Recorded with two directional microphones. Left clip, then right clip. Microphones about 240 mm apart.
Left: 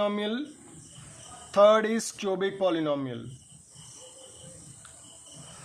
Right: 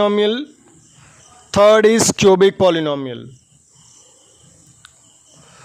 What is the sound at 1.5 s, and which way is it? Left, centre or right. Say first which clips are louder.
Speech: right 10 dB; right.